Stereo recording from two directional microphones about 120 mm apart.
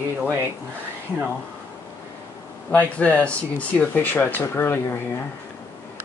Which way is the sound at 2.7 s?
10° left (ahead or behind).